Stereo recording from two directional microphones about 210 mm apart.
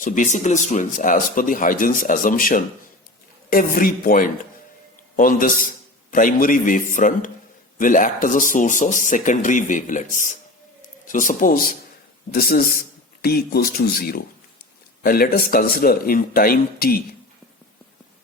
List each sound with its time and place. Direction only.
0.0 s speech: 40° left (ahead or behind)